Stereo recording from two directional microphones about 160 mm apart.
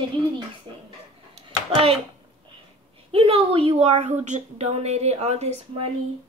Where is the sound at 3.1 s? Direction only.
35° right (ahead or behind).